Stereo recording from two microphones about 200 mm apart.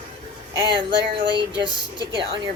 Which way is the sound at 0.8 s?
25° right (ahead or behind).